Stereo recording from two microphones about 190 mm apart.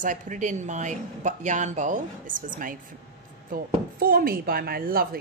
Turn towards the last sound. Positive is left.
turn(degrees=-50)  # may be behind; listen again after turning